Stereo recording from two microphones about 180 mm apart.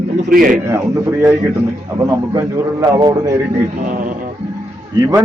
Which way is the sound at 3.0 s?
20° right (ahead or behind).